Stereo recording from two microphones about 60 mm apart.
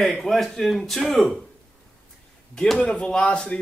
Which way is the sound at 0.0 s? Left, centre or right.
Centre.